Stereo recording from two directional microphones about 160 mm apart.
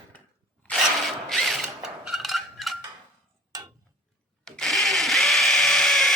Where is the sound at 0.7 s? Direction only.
Centre (ahead or behind).